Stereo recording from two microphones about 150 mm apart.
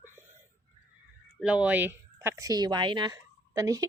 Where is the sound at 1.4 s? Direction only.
10° right (ahead or behind).